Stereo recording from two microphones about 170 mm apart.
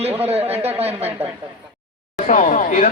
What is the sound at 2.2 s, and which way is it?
Speech, 50° left (ahead or behind).